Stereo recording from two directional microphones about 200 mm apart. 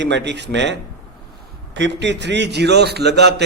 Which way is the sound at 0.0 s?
60° right (ahead or behind).